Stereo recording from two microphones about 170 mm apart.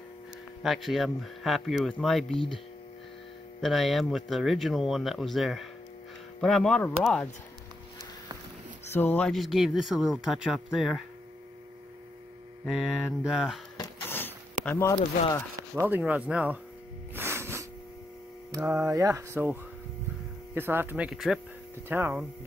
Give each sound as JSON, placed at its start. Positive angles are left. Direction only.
{"t": 0.6, "sound": "speech", "side_deg": 0}
{"t": 3.6, "sound": "speech", "side_deg": 0}
{"t": 8.8, "sound": "speech", "side_deg": 10}
{"t": 12.6, "sound": "speech", "side_deg": 0}
{"t": 14.0, "sound": "a sound", "side_deg": 10}
{"t": 14.6, "sound": "speech", "side_deg": 10}
{"t": 15.8, "sound": "speech", "side_deg": -10}
{"t": 17.1, "sound": "a sound", "side_deg": -15}
{"t": 18.6, "sound": "speech", "side_deg": -5}
{"t": 18.9, "sound": "speech", "side_deg": -20}